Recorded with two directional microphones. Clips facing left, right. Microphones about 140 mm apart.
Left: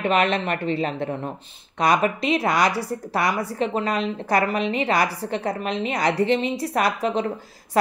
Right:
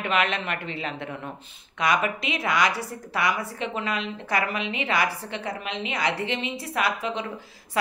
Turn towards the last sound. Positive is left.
turn(degrees=40)  # may be behind; listen again after turning